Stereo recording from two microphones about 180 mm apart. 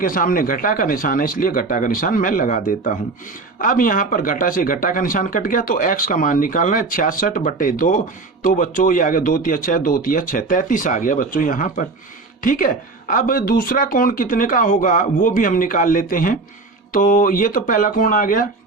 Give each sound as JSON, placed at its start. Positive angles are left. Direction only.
{"t": 0.0, "sound": "speech", "side_deg": 50}